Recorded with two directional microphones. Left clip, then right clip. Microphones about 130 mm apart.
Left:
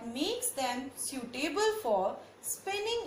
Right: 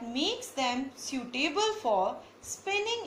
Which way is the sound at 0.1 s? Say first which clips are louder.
Right 3 dB; 35° left (ahead or behind).